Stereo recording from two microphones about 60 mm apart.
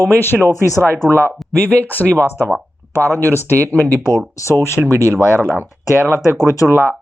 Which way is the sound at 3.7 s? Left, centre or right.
Left.